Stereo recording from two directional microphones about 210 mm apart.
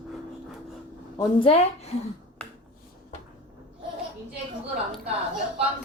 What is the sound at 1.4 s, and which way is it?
Speech, 25° left (ahead or behind).